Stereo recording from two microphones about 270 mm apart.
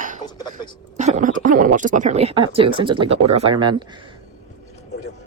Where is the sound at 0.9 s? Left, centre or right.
Right.